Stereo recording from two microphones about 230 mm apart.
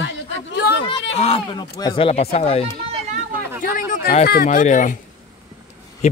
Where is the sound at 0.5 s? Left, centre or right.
Left.